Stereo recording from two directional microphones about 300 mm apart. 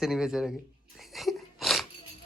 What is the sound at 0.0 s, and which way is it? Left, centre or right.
Speech, centre.